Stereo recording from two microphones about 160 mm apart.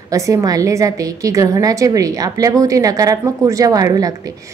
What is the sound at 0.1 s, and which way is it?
A woman's voice, 20° right (ahead or behind).